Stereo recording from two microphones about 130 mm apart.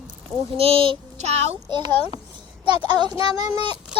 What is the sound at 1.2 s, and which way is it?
Speech, 55° right (ahead or behind).